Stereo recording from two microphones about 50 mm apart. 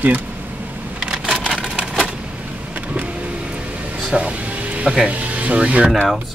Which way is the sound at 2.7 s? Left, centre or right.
Right.